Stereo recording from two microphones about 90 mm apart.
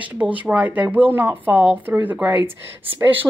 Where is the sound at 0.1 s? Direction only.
15° right (ahead or behind).